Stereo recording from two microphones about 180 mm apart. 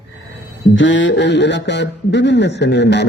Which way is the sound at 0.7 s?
90° left.